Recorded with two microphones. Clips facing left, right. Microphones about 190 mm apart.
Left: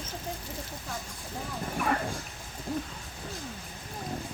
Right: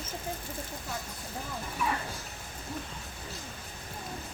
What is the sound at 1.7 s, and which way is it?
Music, 55° left (ahead or behind).